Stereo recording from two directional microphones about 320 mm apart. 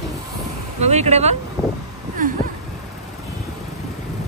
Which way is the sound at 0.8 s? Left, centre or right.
Right.